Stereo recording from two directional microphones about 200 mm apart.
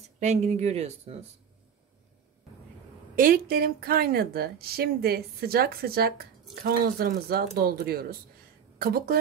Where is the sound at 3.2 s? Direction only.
45° right (ahead or behind).